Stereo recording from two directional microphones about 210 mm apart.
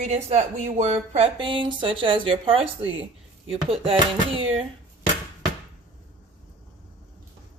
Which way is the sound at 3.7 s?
25° right (ahead or behind).